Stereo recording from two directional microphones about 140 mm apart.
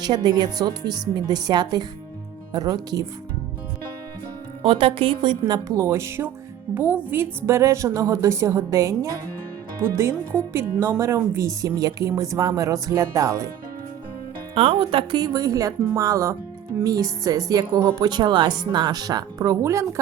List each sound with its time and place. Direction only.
0.0 s speech: 30° right (ahead or behind)
4.6 s a woman's voice: 40° right (ahead or behind)
5.6 s speech: 25° right (ahead or behind)
14.5 s speech: 40° right (ahead or behind); by 19.9 s 20° right (ahead or behind)